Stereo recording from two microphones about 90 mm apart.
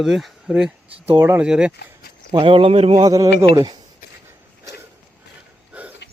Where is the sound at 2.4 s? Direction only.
85° right.